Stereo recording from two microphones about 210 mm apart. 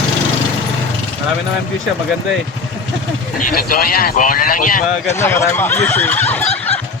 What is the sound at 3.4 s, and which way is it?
Speech, 45° left (ahead or behind).